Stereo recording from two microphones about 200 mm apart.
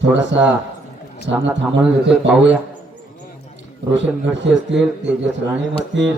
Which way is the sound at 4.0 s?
65° right (ahead or behind).